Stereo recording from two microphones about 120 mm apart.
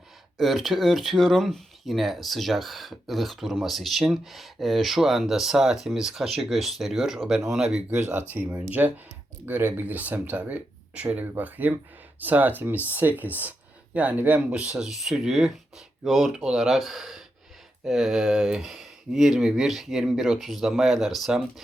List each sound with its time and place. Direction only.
0.3 s speech: centre (ahead or behind)
7.9 s speech: 20° right (ahead or behind); by 21.4 s centre (ahead or behind)